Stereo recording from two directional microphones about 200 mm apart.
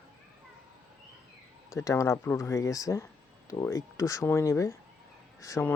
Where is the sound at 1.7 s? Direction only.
15° left (ahead or behind).